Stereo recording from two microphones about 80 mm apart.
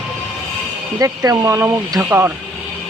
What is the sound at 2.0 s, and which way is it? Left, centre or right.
Speech, right.